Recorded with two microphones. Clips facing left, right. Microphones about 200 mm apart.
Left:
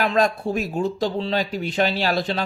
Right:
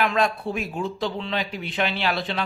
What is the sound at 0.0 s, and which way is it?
Speech, 40° left (ahead or behind).